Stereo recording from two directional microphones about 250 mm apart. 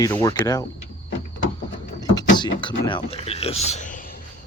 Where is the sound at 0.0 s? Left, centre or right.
Centre.